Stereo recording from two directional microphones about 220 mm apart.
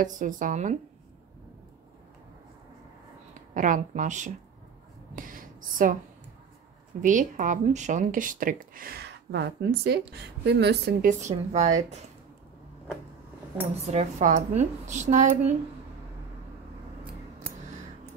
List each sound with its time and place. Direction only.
0.0 s speech: 35° right (ahead or behind)
3.5 s speech: 35° right (ahead or behind)
5.1 s a sound: 40° right (ahead or behind)
7.0 s speech: 35° right (ahead or behind)
13.7 s speech: 30° right (ahead or behind)